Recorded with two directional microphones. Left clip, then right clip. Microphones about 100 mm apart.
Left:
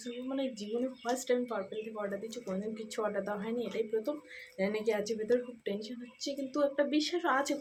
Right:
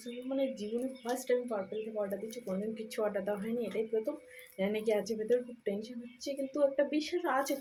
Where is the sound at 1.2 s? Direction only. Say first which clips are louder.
Right 2 dB; 30° left (ahead or behind).